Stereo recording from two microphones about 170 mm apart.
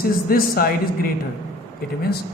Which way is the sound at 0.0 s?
60° left (ahead or behind).